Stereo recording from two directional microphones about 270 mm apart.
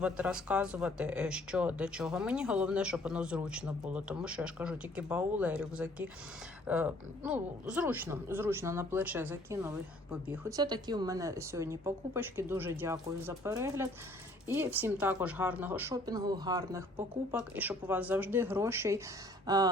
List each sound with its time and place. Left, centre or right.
0.0 s a woman's voice: centre